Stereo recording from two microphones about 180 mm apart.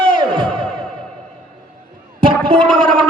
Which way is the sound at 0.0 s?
25° right (ahead or behind).